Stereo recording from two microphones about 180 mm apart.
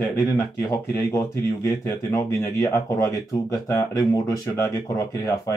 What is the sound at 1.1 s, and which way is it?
Speech, 15° left (ahead or behind).